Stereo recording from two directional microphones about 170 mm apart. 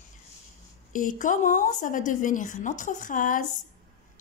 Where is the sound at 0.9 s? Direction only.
50° left (ahead or behind).